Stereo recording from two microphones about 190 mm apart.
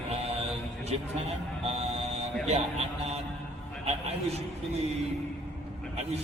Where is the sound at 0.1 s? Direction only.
35° right (ahead or behind).